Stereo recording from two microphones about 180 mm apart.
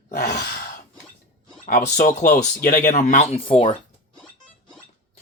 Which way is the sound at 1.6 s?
40° left (ahead or behind).